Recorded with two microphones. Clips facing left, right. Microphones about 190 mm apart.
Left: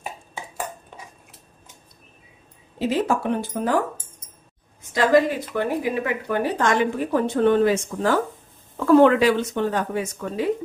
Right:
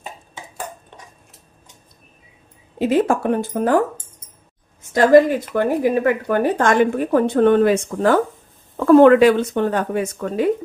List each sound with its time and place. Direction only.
0.5 s dishes: 10° left (ahead or behind)
2.7 s a woman's voice: 55° right (ahead or behind)
5.5 s a woman's voice: 45° right (ahead or behind)